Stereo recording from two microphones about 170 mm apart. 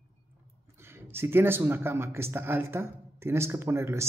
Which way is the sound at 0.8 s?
15° right (ahead or behind).